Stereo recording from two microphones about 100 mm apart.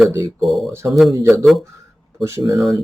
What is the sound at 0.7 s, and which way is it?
Speech, 25° right (ahead or behind).